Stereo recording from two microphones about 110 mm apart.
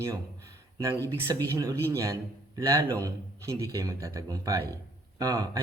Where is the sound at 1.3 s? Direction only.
30° right (ahead or behind).